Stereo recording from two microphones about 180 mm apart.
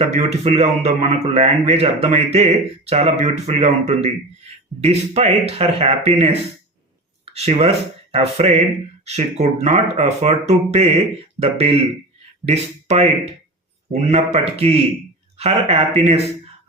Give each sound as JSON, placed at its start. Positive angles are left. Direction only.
{"t": 0.0, "sound": "a man's voice", "side_deg": -35}
{"t": 7.3, "sound": "a man's voice", "side_deg": -35}